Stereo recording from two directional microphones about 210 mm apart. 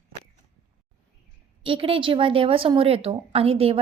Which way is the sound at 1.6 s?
25° right (ahead or behind).